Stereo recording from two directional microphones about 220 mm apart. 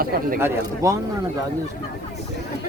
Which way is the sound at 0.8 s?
15° right (ahead or behind).